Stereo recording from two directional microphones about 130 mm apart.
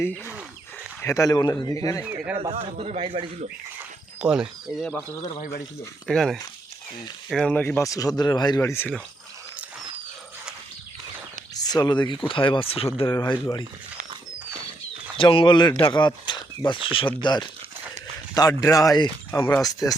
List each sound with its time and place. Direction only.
1.0 s speech: 25° left (ahead or behind)
2.0 s speech: 15° right (ahead or behind)
2.4 s speech: 50° right (ahead or behind)
4.2 s speech: 5° right (ahead or behind)
6.1 s speech: 5° left (ahead or behind)
7.5 s speech: 15° left (ahead or behind)
11.5 s speech: 30° left (ahead or behind); by 13.1 s 45° left (ahead or behind)
13.1 s speech: 35° left (ahead or behind)
15.2 s speech: 45° left (ahead or behind)
18.6 s speech: 25° left (ahead or behind)